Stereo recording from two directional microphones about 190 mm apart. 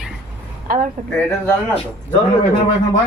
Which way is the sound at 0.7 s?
50° right (ahead or behind).